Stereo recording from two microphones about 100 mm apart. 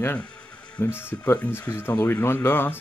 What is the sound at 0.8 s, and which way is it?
Speech, 25° left (ahead or behind).